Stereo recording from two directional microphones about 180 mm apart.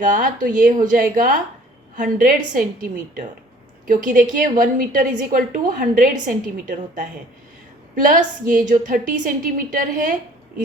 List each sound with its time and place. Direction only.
0.0 s a woman's voice: 45° right (ahead or behind)